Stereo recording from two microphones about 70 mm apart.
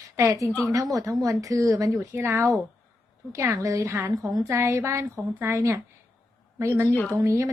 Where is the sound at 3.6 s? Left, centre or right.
Right.